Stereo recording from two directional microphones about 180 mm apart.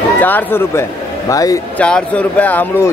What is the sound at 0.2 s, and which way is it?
A man's voice, 10° left (ahead or behind).